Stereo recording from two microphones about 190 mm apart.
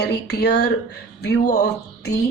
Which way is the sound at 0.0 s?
60° left (ahead or behind).